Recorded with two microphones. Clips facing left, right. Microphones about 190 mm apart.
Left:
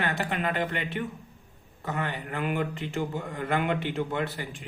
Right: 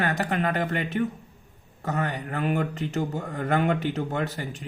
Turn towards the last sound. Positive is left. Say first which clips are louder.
# right 2 dB
turn(degrees=-40)  # may be behind; listen again after turning